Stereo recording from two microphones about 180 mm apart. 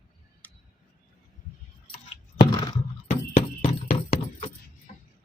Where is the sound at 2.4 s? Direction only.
20° left (ahead or behind).